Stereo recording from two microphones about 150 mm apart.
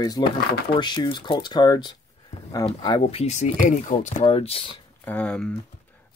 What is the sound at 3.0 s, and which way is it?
Speech, 45° left (ahead or behind).